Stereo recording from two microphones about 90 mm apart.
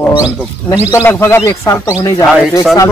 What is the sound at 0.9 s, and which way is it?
A man's voice, 30° left (ahead or behind).